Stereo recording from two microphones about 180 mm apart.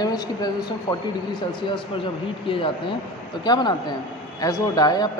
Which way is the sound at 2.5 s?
30° left (ahead or behind).